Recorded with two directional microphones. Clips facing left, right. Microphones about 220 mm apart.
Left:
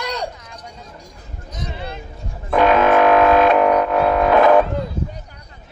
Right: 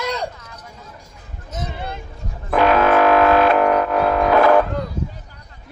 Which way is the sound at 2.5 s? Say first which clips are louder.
Left 1 dB; 5° right (ahead or behind).